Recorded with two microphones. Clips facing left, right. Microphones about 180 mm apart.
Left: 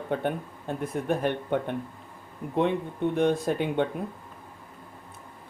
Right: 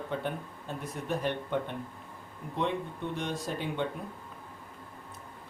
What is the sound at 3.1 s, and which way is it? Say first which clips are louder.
Speech: left 11 dB; 55° left (ahead or behind).